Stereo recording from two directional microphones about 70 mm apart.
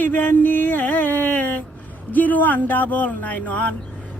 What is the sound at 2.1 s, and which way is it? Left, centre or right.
Speech, left.